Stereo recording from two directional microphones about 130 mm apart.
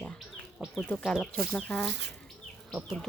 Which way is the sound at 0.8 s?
5° left (ahead or behind).